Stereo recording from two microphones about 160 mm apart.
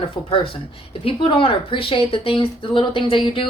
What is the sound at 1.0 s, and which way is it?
Speech, 35° left (ahead or behind).